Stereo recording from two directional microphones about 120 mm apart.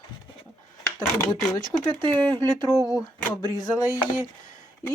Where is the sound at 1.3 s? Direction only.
35° left (ahead or behind).